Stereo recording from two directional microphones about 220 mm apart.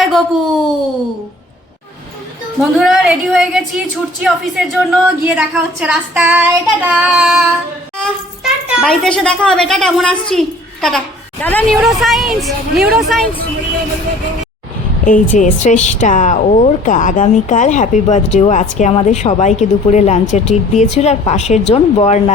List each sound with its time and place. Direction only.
0.0 s a child's voice: centre (ahead or behind)
2.6 s a woman's voice: centre (ahead or behind)
8.6 s a woman's voice: 5° right (ahead or behind)
15.0 s speech: 35° left (ahead or behind)